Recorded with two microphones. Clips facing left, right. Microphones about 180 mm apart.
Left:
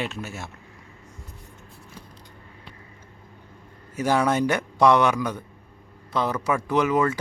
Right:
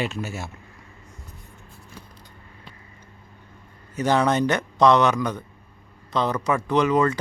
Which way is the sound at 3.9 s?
10° left (ahead or behind).